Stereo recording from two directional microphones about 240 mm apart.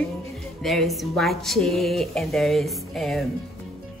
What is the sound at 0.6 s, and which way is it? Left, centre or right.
Speech, centre.